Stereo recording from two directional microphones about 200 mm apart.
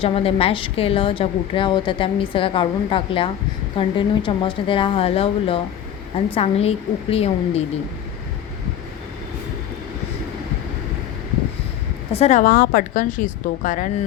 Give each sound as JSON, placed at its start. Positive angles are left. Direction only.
{"t": 0.0, "sound": "a woman's voice", "side_deg": 30}
{"t": 12.1, "sound": "a woman's voice", "side_deg": 35}